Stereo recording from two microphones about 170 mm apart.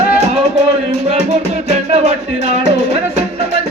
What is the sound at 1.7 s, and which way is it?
Music, 40° right (ahead or behind).